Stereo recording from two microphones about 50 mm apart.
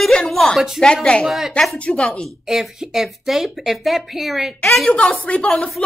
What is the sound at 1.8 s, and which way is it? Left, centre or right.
Speech, left.